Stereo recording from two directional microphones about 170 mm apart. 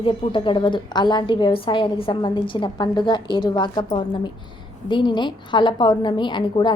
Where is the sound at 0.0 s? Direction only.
30° left (ahead or behind).